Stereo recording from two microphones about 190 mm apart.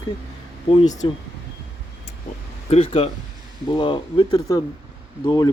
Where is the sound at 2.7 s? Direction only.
30° left (ahead or behind).